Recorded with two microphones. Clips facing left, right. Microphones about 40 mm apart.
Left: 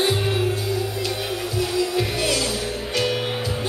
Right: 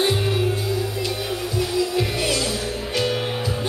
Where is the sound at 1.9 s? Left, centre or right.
Centre.